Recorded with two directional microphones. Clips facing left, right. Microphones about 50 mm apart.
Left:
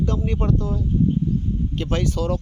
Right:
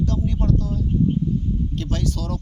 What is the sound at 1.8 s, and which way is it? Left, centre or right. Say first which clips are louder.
Speech: left 3 dB; left.